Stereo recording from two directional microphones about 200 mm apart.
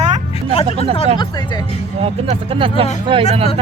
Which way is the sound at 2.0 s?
30° right (ahead or behind).